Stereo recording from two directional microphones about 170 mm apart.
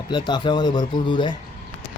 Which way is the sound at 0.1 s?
25° left (ahead or behind).